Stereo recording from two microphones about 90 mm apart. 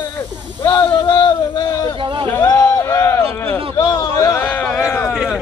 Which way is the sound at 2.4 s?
40° left (ahead or behind).